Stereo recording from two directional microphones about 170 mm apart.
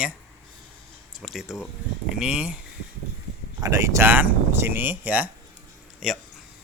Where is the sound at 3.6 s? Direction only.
15° right (ahead or behind).